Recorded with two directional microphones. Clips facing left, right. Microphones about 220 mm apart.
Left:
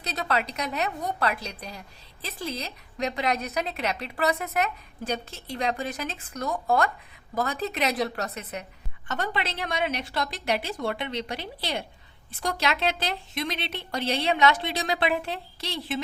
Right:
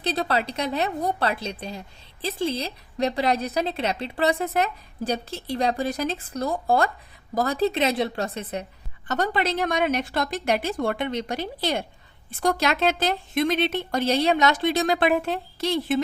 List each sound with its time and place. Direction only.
0.0 s a woman's voice: 30° right (ahead or behind)
9.0 s speech: 40° right (ahead or behind)